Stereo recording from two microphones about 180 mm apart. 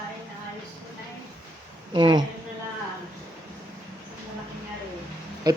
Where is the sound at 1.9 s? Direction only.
25° right (ahead or behind).